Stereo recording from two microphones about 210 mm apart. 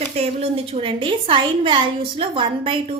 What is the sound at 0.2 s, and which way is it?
A woman's voice, 30° right (ahead or behind).